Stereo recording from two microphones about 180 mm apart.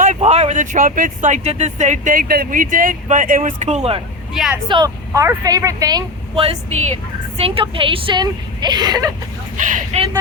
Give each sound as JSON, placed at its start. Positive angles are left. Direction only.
{"t": 0.0, "sound": "speech", "side_deg": -40}
{"t": 4.7, "sound": "a woman's voice", "side_deg": -20}
{"t": 7.3, "sound": "a woman's voice", "side_deg": -30}
{"t": 9.6, "sound": "speech", "side_deg": -45}